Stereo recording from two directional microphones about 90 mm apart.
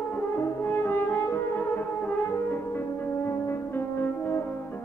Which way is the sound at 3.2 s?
30° left (ahead or behind).